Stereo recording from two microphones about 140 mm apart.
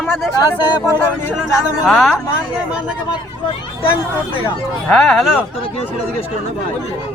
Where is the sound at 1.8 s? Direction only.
Centre (ahead or behind).